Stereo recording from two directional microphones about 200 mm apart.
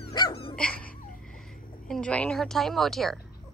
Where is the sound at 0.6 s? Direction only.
5° left (ahead or behind).